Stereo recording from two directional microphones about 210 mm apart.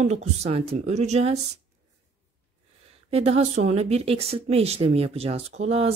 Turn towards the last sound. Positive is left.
turn(degrees=-30)  # may be behind; listen again after turning